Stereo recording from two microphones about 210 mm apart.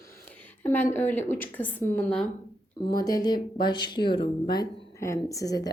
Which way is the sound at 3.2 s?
20° left (ahead or behind).